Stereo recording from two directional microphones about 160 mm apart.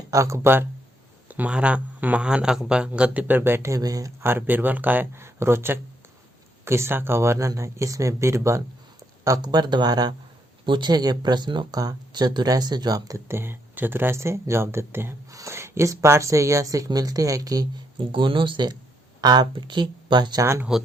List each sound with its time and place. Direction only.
0.1 s speech: 20° right (ahead or behind)